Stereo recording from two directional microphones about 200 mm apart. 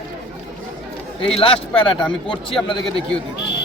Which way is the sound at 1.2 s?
30° left (ahead or behind).